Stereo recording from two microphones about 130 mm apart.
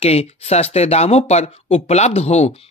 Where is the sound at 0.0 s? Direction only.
50° left (ahead or behind).